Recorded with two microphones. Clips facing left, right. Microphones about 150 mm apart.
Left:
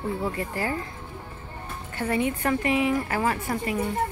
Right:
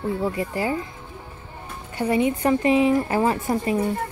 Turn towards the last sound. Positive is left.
turn(degrees=-25)  # may be behind; listen again after turning